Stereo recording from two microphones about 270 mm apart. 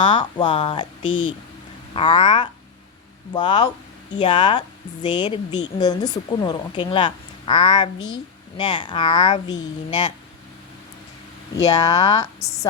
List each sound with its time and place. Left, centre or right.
0.0 s a woman's voice: centre
11.5 s a woman's voice: centre